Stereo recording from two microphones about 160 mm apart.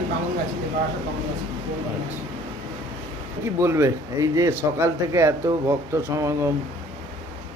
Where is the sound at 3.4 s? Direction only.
15° right (ahead or behind).